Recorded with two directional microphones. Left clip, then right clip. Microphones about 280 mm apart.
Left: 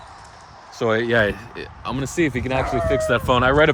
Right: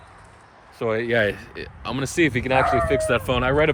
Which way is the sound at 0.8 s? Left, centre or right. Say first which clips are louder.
Left 3 dB; centre.